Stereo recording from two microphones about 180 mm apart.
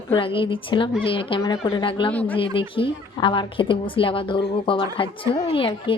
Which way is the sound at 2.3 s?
30° left (ahead or behind).